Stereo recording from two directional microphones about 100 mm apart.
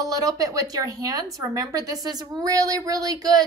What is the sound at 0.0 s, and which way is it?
A woman's voice, 35° right (ahead or behind).